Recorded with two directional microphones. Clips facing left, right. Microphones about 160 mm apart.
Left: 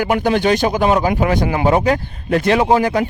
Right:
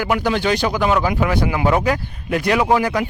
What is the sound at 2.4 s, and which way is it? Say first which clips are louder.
Speech: left 2 dB; 25° left (ahead or behind).